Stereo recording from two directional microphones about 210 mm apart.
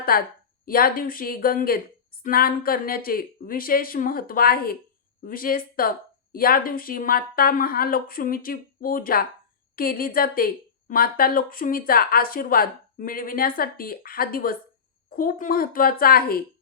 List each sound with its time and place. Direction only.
0.1 s a woman's voice: 45° left (ahead or behind)